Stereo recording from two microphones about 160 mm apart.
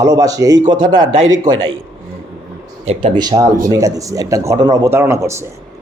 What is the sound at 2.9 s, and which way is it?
Speech, 40° right (ahead or behind).